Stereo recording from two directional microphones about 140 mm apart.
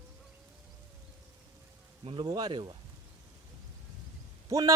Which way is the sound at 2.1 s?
30° right (ahead or behind).